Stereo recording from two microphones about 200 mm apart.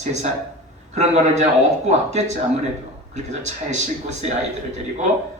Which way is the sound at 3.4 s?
35° right (ahead or behind).